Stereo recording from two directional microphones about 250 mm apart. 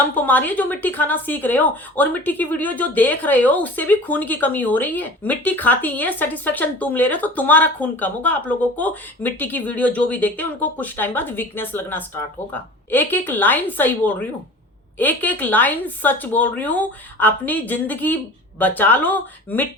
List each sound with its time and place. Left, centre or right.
0.2 s speech: centre